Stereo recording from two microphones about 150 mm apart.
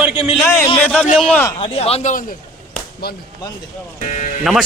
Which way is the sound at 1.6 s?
40° left (ahead or behind).